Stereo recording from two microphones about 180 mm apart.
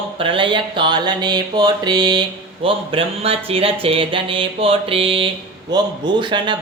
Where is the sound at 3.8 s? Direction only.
30° right (ahead or behind).